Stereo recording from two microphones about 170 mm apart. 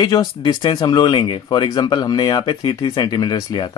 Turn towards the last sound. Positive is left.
turn(degrees=25)  # may be behind; listen again after turning